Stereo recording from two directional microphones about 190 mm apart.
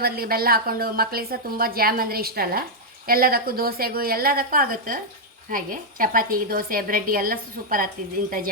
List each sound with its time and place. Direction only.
0.0 s a woman's voice: 55° right (ahead or behind)